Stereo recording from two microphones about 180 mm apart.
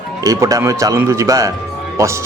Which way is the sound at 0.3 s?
20° right (ahead or behind).